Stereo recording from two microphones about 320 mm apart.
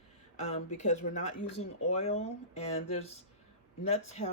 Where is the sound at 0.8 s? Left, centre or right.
Left.